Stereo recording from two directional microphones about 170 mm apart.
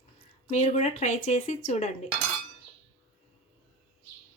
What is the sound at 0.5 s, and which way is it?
Speech, 40° left (ahead or behind).